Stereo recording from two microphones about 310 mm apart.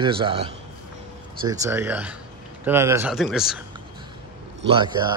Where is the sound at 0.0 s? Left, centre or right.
Centre.